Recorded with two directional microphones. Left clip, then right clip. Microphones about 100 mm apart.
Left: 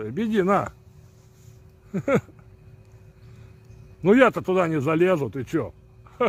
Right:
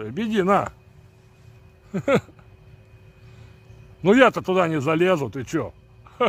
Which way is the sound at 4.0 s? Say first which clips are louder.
Right 1 dB; 5° right (ahead or behind).